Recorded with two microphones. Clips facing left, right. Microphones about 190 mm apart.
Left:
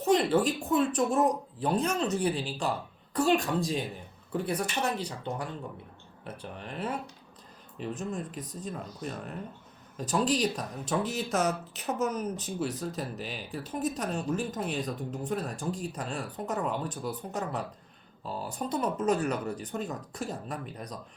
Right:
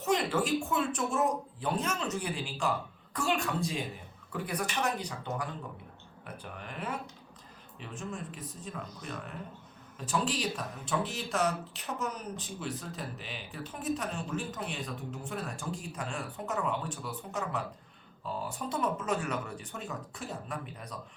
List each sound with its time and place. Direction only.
0.0 s speech: 35° left (ahead or behind)